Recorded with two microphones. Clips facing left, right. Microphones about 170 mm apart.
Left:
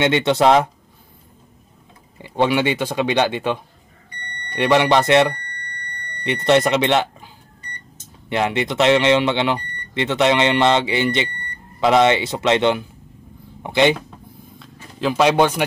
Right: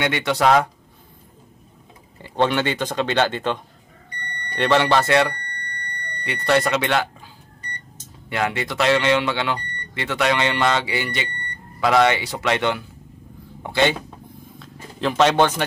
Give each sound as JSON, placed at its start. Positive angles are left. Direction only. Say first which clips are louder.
{"t": 0.0, "sound": "speech", "louder": "left 4 dB", "side_deg": 25}
{"t": 2.1, "sound": "speech", "louder": "left 2 dB", "side_deg": 10}
{"t": 4.6, "sound": "speech", "louder": "left 2 dB", "side_deg": 15}
{"t": 8.3, "sound": "speech", "louder": "left 4 dB", "side_deg": 20}
{"t": 14.6, "sound": "speech", "louder": "left 1 dB", "side_deg": 0}